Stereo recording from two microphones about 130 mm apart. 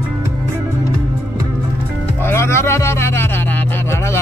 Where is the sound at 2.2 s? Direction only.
20° left (ahead or behind).